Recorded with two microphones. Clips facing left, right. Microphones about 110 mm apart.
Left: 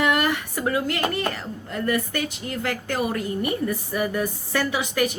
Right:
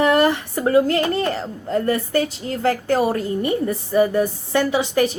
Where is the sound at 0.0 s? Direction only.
30° right (ahead or behind).